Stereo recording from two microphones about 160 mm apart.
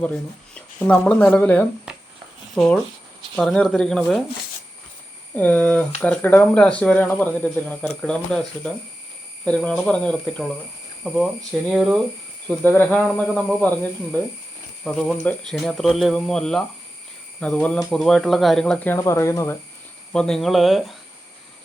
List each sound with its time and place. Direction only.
0.5 s speech: 10° left (ahead or behind)
5.3 s speech: 10° left (ahead or behind)
12.5 s speech: 10° left (ahead or behind)
18.9 s speech: 20° left (ahead or behind)
20.1 s speech: 5° left (ahead or behind)